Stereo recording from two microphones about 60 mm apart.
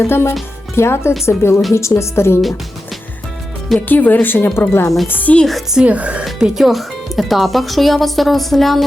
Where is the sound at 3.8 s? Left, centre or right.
Left.